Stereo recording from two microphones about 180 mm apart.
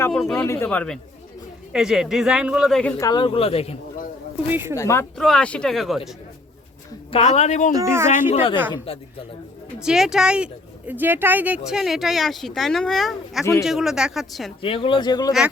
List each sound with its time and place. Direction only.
0.0 s speech: 5° left (ahead or behind)
0.4 s speech: 15° left (ahead or behind)
1.7 s speech: 5° right (ahead or behind)
3.0 s speech: 25° left (ahead or behind)
4.5 s a man's voice: 10° right (ahead or behind)
4.8 s speech: 15° left (ahead or behind)
5.1 s speech: centre (ahead or behind)
7.1 s speech: 35° left (ahead or behind)
7.7 s a man's voice: 15° right (ahead or behind)
8.1 s speech: 35° left (ahead or behind)
9.8 s speech: centre (ahead or behind)
13.4 s speech: 15° left (ahead or behind)
13.7 s speech: centre (ahead or behind)
14.6 s speech: 30° left (ahead or behind)